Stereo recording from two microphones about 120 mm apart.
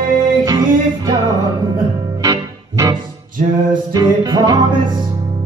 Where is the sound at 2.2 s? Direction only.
35° right (ahead or behind).